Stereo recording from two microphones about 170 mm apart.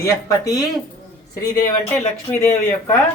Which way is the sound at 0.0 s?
20° left (ahead or behind).